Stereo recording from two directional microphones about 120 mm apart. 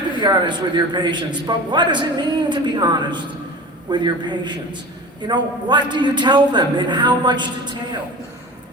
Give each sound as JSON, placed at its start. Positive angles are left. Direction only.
{"t": 0.2, "sound": "a man's voice", "side_deg": -40}